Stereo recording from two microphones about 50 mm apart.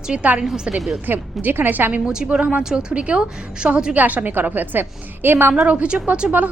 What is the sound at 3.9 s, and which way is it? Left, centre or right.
A woman's voice, right.